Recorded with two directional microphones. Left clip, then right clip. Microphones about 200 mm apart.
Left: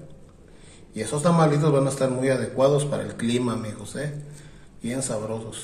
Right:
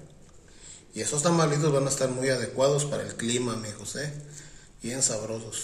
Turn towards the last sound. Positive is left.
turn(degrees=-15)  # may be behind; listen again after turning